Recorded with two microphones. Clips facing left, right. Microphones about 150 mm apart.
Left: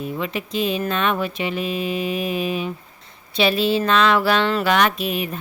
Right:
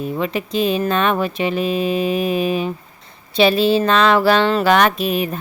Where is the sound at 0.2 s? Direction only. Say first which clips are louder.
Right 5 dB; 40° right (ahead or behind).